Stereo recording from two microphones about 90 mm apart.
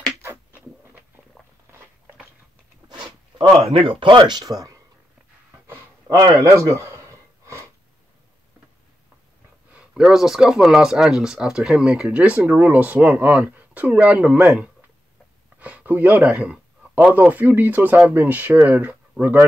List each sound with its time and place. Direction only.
0.2 s a sound: 30° right (ahead or behind)
3.7 s speech: 75° right (ahead or behind); by 4.8 s 40° right (ahead or behind)
6.0 s speech: 40° right (ahead or behind)
9.7 s speech: 10° right (ahead or behind)
15.6 s a sound: 15° right (ahead or behind)
17.1 s speech: 20° right (ahead or behind)